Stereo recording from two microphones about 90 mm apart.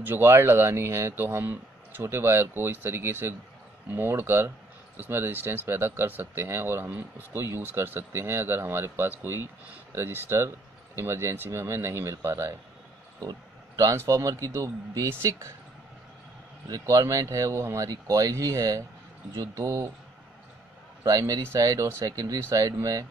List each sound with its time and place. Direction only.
0.0 s speech: 25° right (ahead or behind)
13.2 s a man's voice: 45° right (ahead or behind)
16.6 s a man's voice: 40° right (ahead or behind)
21.0 s a man's voice: 45° right (ahead or behind)